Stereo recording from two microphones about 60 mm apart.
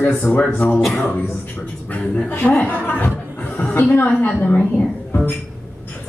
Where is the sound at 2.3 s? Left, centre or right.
Left.